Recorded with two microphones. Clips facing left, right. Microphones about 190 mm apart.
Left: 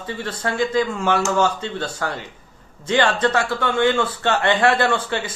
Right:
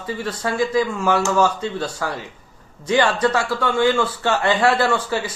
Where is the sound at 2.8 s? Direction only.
25° left (ahead or behind).